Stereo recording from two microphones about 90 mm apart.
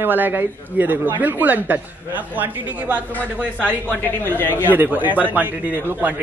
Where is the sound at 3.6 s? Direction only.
20° left (ahead or behind).